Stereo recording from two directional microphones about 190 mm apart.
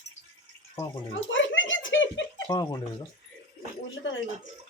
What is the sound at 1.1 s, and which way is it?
A child's voice, 85° left.